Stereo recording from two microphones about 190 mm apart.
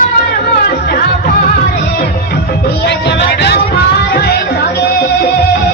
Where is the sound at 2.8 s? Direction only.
60° left (ahead or behind).